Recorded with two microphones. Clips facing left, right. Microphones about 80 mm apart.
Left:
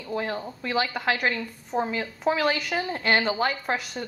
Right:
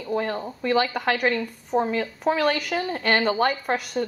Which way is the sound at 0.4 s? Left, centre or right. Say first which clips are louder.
Right 3 dB; centre.